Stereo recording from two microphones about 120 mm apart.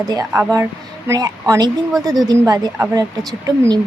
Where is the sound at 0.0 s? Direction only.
30° right (ahead or behind).